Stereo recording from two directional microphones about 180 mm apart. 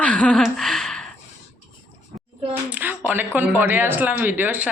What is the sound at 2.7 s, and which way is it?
A woman's voice, 10° right (ahead or behind).